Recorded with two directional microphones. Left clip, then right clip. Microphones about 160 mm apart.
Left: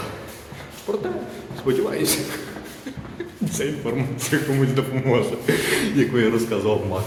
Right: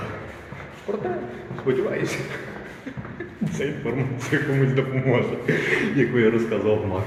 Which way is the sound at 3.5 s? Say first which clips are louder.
Left 2 dB; 35° left (ahead or behind).